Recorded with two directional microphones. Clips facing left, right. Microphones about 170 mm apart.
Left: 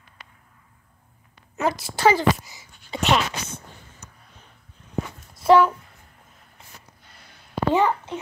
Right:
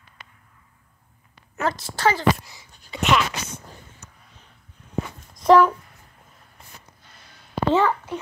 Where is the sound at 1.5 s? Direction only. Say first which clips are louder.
Left 1 dB; 10° left (ahead or behind).